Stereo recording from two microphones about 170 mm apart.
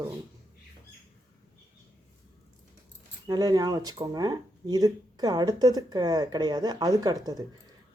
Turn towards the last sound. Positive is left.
turn(degrees=-20)  # may be behind; listen again after turning